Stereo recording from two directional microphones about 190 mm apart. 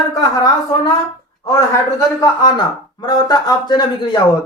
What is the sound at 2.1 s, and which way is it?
Speech, 20° left (ahead or behind).